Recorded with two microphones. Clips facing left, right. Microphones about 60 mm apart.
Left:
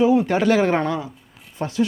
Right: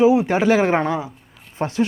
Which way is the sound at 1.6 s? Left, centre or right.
Right.